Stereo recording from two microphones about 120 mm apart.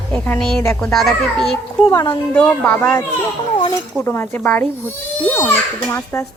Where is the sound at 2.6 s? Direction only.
20° left (ahead or behind).